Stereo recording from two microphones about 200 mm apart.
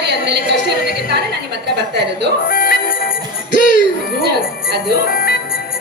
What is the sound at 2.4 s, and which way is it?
Music, 45° left (ahead or behind).